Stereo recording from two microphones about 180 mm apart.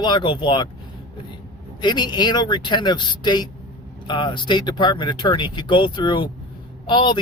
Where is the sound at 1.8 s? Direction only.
25° left (ahead or behind).